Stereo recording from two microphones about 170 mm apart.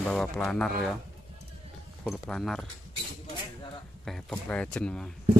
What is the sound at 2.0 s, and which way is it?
Speech, centre (ahead or behind).